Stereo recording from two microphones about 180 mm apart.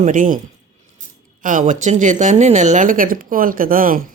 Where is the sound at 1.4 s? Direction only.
45° right (ahead or behind).